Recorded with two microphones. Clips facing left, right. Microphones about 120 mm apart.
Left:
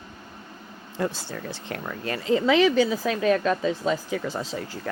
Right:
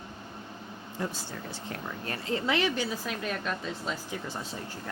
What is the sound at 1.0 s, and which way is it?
Speech, 80° left.